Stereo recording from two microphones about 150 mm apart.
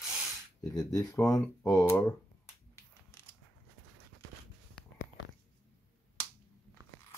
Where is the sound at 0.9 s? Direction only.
20° left (ahead or behind).